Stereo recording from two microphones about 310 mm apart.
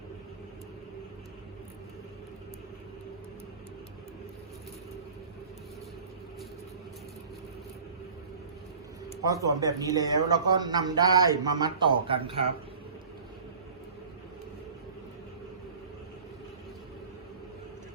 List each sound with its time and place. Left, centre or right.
9.2 s speech: centre